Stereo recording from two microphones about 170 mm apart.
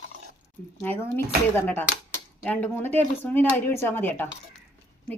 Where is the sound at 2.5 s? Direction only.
10° left (ahead or behind).